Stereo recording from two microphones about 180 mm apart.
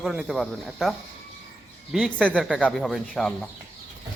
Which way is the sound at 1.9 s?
5° left (ahead or behind).